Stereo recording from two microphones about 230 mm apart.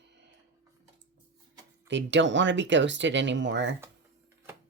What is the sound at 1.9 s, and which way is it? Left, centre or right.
Speech, right.